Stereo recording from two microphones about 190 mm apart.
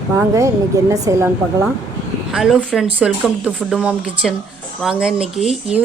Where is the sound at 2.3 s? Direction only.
5° right (ahead or behind).